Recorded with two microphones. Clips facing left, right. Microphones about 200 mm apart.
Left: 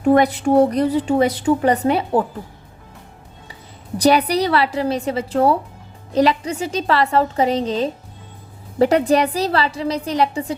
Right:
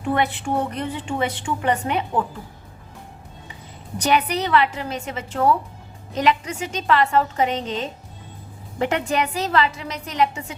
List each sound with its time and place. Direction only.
0.0 s a woman's voice: 40° left (ahead or behind)
3.9 s a woman's voice: 35° left (ahead or behind)